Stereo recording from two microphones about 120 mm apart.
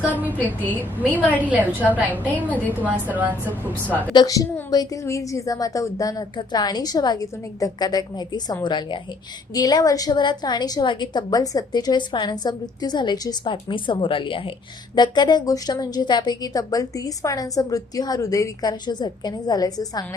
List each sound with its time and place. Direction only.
0.0 s a woman's voice: 15° right (ahead or behind)
0.3 s a woman's voice: 15° left (ahead or behind)
1.5 s a woman's voice: 10° right (ahead or behind)
2.0 s a woman's voice: 15° left (ahead or behind)
2.8 s a woman's voice: 15° right (ahead or behind)
3.5 s a woman's voice: 15° left (ahead or behind)
4.1 s a woman's voice: 35° left (ahead or behind)